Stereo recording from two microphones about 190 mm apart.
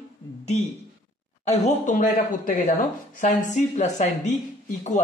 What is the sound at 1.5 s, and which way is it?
Speech, 40° left (ahead or behind).